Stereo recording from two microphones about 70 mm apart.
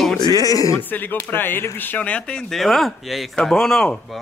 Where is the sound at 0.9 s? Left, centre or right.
Left.